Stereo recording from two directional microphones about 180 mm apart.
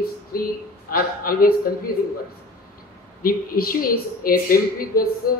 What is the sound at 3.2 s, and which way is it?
Speech, 50° left (ahead or behind).